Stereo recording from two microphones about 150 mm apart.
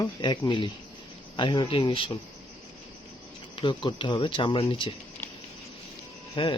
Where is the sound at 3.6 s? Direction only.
30° left (ahead or behind).